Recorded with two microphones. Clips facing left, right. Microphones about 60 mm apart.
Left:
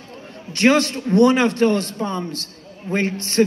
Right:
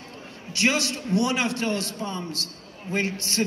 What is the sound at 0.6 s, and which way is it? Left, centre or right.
A man's voice, left.